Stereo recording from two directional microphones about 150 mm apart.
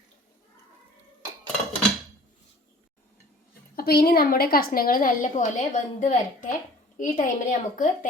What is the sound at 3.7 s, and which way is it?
A woman's voice, 90° left.